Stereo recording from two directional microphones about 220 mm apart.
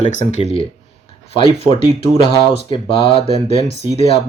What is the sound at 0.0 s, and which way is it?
Speech, 35° left (ahead or behind).